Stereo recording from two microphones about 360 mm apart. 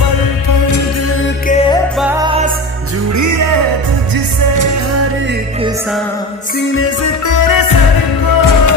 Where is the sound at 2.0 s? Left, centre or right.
Centre.